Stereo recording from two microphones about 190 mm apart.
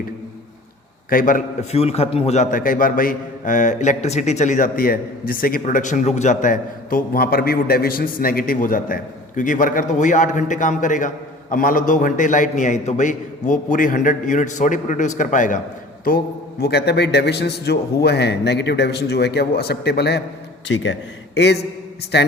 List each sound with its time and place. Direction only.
1.1 s a man's voice: 45° left (ahead or behind)
1.8 s a man's voice: 30° left (ahead or behind)
16.0 s a man's voice: 55° left (ahead or behind)
20.7 s a man's voice: 75° left (ahead or behind); by 22.3 s 60° left (ahead or behind)